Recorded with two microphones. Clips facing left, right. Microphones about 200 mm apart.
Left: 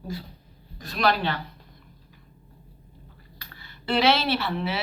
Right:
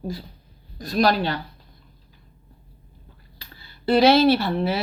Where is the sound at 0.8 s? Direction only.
40° right (ahead or behind).